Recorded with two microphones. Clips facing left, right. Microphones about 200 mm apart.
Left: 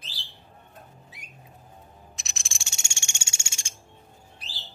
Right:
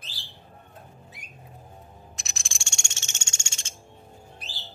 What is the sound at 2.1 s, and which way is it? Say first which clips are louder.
Music: right 2 dB; centre (ahead or behind).